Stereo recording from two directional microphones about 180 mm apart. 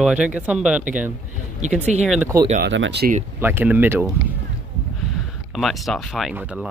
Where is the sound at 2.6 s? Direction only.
80° right.